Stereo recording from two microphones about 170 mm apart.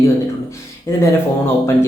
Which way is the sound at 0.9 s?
15° left (ahead or behind).